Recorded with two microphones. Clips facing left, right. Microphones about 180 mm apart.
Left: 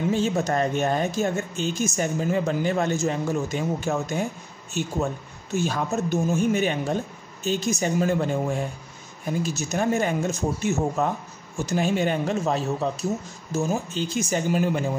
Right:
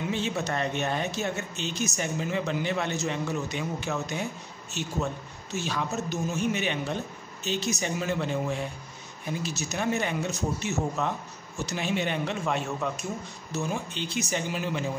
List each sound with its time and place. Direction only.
0.1 s speech: 45° left (ahead or behind)